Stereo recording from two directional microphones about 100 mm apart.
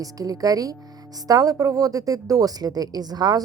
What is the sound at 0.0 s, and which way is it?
A woman's voice, 35° right (ahead or behind).